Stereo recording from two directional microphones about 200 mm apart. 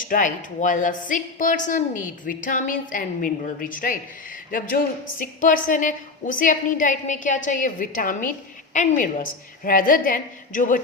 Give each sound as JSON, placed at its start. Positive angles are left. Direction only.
{"t": 0.0, "sound": "a woman's voice", "side_deg": 40}